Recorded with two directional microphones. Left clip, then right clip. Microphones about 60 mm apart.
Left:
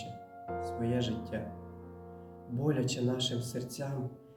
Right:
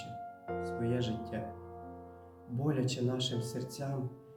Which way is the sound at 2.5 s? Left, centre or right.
Left.